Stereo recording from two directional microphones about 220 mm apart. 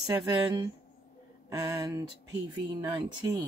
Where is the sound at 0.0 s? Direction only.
15° right (ahead or behind).